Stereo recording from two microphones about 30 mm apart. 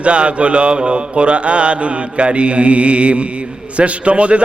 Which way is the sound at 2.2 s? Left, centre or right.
Right.